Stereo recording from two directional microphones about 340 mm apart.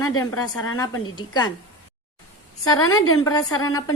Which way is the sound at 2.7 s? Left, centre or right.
Left.